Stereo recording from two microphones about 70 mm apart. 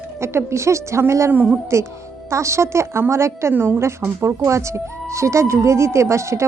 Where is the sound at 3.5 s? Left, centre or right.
Right.